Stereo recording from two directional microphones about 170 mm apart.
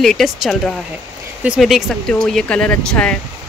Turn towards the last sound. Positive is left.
turn(degrees=5)  # may be behind; listen again after turning